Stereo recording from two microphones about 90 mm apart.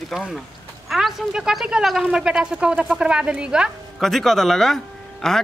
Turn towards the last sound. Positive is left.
turn(degrees=5)  # may be behind; listen again after turning